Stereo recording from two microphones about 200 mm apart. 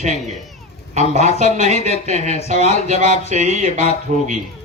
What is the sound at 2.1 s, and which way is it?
Speech, 35° right (ahead or behind).